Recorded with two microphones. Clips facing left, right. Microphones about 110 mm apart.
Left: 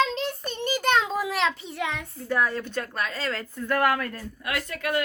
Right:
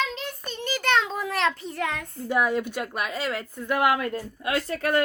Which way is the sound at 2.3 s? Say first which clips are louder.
Right 2 dB; 15° right (ahead or behind).